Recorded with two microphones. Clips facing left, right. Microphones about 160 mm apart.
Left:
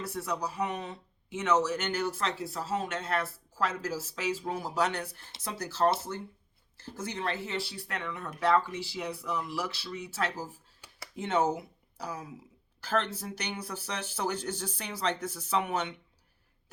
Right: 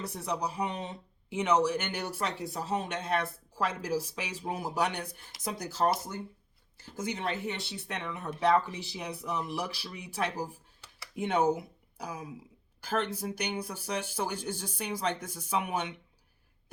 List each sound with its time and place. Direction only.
0.3 s speech: 15° right (ahead or behind)